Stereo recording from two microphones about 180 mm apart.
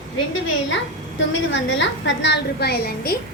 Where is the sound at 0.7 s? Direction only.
90° left; by 3.1 s 60° left (ahead or behind).